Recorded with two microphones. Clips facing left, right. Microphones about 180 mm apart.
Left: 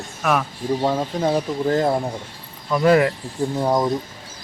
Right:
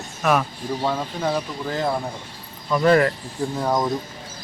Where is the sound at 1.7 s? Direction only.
45° left (ahead or behind).